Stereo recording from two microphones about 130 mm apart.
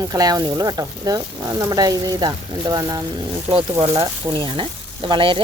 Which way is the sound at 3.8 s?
30° right (ahead or behind).